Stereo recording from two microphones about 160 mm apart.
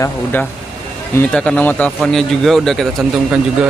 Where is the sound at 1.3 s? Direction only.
5° left (ahead or behind).